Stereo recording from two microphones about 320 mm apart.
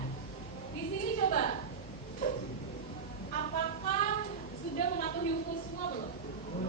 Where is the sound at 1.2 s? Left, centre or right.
Left.